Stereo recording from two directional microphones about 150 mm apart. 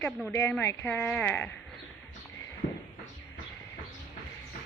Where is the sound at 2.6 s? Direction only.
60° left (ahead or behind).